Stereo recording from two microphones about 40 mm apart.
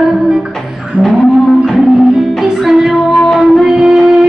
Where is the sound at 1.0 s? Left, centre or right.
Right.